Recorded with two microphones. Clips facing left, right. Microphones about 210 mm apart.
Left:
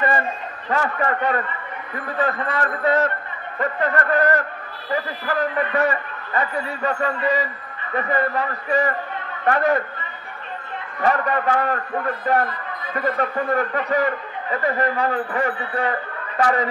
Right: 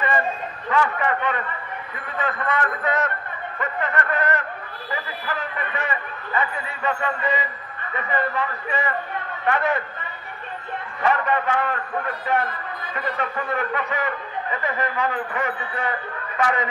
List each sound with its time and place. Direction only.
0.7 s a man's voice: 40° left (ahead or behind)
11.0 s a man's voice: 40° left (ahead or behind)